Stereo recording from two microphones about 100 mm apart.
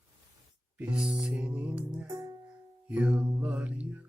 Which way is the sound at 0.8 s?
10° right (ahead or behind).